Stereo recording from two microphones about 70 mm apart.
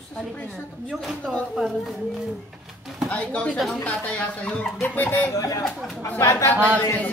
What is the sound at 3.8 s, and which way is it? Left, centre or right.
Speech, centre.